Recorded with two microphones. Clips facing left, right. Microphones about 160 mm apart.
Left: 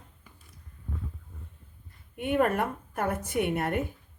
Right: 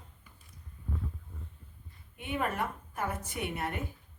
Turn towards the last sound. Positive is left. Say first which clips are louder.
# left 8 dB
turn(degrees=55)  # may be behind; listen again after turning